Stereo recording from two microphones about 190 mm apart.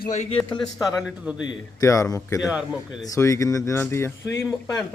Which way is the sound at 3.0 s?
15° left (ahead or behind).